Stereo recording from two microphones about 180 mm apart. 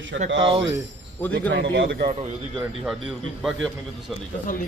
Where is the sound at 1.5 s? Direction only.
75° right (ahead or behind).